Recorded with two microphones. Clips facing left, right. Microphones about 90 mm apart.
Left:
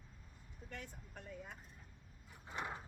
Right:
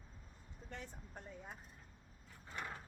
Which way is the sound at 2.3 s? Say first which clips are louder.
Left 3 dB; 20° left (ahead or behind).